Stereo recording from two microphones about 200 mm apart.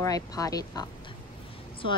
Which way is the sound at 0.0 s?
20° left (ahead or behind).